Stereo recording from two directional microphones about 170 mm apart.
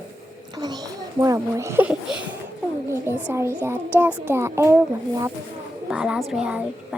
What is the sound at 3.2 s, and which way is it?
A child's voice, 15° right (ahead or behind).